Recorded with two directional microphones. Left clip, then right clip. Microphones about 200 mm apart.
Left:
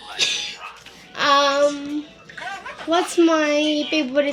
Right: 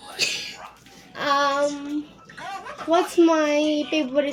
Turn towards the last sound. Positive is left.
turn(degrees=15)  # may be behind; listen again after turning